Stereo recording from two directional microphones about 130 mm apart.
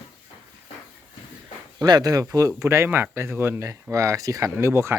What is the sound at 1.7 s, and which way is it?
Speech, 30° right (ahead or behind).